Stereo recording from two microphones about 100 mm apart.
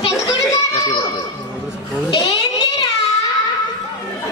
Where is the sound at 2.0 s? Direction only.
45° left (ahead or behind).